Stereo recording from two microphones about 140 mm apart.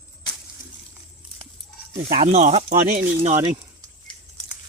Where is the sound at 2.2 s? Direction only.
50° right (ahead or behind).